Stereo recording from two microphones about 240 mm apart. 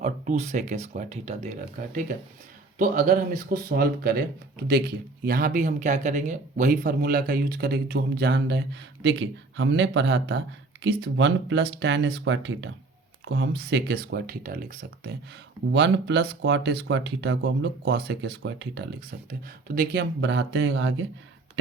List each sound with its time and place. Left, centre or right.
0.0 s speech: right
5.2 s speech: right
15.7 s speech: right
19.3 s speech: right